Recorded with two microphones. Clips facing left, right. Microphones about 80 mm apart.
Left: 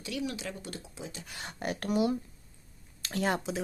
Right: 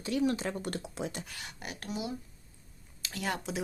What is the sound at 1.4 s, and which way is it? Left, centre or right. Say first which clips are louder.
Speech: left 8 dB; left.